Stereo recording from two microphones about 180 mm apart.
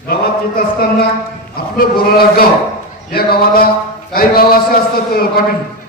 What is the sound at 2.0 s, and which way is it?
A man's voice, 55° left (ahead or behind).